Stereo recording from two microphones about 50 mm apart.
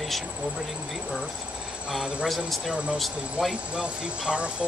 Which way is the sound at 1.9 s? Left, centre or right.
Centre.